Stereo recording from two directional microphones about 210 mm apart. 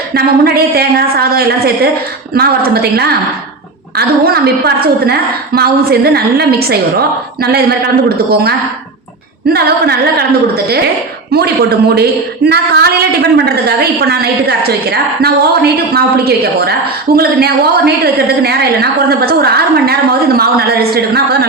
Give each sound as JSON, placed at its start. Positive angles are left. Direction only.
{"t": 0.1, "sound": "a woman's voice", "side_deg": -45}
{"t": 9.5, "sound": "a woman's voice", "side_deg": -50}